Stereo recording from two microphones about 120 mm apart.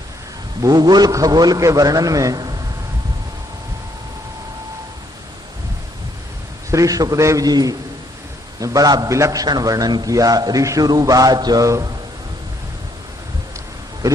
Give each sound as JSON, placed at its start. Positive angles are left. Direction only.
{"t": 0.6, "sound": "a man's voice", "side_deg": -35}
{"t": 6.7, "sound": "a man's voice", "side_deg": -30}